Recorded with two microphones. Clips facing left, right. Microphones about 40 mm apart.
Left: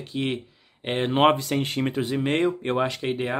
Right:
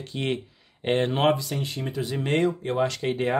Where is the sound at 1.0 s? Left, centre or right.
Left.